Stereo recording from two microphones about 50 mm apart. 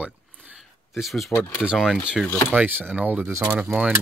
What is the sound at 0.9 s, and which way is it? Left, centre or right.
Speech, centre.